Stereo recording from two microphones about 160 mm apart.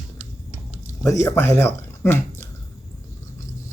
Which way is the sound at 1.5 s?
15° left (ahead or behind).